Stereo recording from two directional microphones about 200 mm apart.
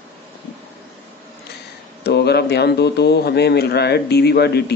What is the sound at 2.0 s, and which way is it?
A man's voice, 55° left (ahead or behind).